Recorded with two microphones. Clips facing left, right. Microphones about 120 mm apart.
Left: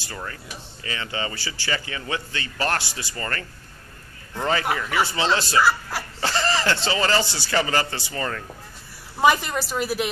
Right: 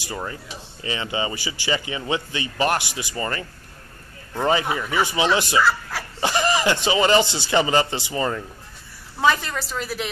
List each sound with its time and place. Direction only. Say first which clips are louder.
0.0 s speech: right 4 dB; 20° right (ahead or behind)
5.6 s speech: even; 5° left (ahead or behind)
6.2 s speech: right 3 dB; 15° right (ahead or behind)
9.2 s a woman's voice: left 2 dB; 10° left (ahead or behind)